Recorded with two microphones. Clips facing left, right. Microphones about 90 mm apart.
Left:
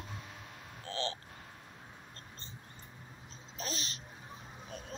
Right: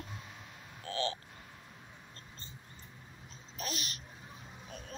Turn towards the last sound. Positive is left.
turn(degrees=30)  # may be behind; listen again after turning